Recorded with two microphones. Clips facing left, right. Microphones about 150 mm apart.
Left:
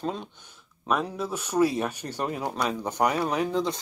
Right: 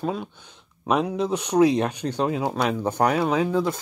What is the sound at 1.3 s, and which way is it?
Speech, 65° right (ahead or behind).